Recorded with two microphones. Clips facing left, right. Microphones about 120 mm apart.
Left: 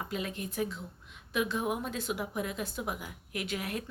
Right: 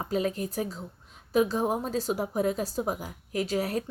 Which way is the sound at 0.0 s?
40° right (ahead or behind).